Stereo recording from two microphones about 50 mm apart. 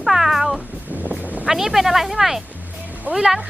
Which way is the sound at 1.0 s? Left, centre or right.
Right.